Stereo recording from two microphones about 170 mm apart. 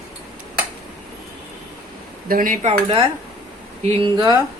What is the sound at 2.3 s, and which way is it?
Speech, 55° right (ahead or behind).